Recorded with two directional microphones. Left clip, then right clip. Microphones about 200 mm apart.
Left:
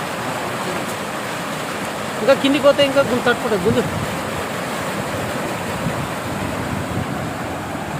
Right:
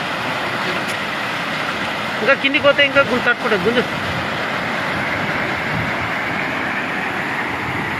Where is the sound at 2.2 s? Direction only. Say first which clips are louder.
Left 1 dB; 15° left (ahead or behind).